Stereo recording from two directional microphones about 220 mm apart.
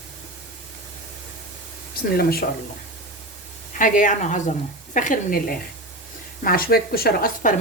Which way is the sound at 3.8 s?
35° left (ahead or behind).